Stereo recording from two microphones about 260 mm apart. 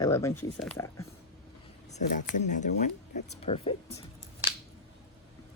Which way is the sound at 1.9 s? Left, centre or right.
Left.